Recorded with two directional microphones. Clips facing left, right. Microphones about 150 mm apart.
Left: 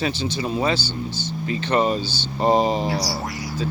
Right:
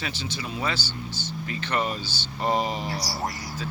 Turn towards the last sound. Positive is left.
turn(degrees=-50)  # may be behind; listen again after turning